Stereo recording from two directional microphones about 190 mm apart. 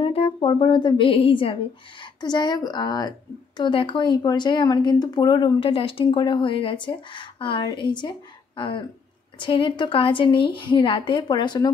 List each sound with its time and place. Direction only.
0.0 s speech: 30° left (ahead or behind)